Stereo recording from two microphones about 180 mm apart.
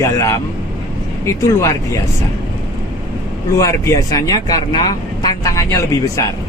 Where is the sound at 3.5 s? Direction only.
15° left (ahead or behind).